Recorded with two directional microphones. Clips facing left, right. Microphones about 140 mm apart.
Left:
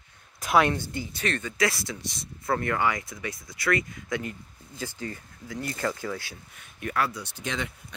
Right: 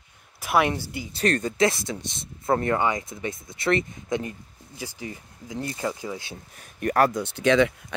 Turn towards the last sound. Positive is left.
turn(degrees=-90)